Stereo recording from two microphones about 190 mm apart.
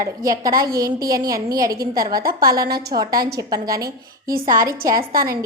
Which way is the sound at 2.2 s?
50° right (ahead or behind).